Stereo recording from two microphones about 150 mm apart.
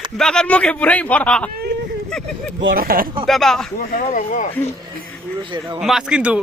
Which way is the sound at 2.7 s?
75° right (ahead or behind).